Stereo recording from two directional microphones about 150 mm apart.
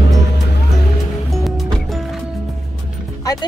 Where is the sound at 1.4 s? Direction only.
Centre (ahead or behind).